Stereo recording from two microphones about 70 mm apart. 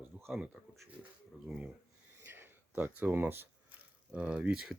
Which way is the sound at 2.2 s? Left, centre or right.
Right.